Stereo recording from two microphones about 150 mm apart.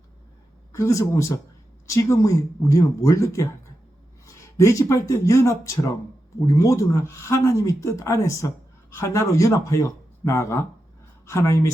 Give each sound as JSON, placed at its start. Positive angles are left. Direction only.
{"t": 0.7, "sound": "speech", "side_deg": 20}